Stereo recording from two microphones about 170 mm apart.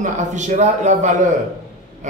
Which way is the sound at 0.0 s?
45° right (ahead or behind).